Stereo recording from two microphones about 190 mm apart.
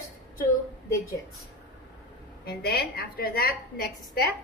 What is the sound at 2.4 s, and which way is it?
A woman's voice, 55° left (ahead or behind).